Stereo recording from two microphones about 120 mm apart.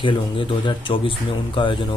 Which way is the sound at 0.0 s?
40° left (ahead or behind).